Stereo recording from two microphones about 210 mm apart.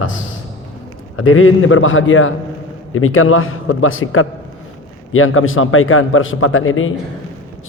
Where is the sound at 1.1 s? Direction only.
75° left (ahead or behind).